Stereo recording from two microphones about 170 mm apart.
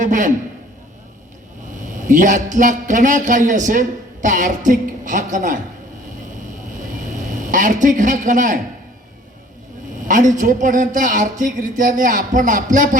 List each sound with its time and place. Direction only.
0.0 s a man's voice: 50° right (ahead or behind)
2.0 s a man's voice: 50° right (ahead or behind)
7.1 s a man's voice: 50° right (ahead or behind)
10.1 s a man's voice: 50° right (ahead or behind)